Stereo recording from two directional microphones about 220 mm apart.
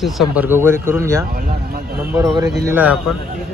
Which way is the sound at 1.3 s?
40° right (ahead or behind).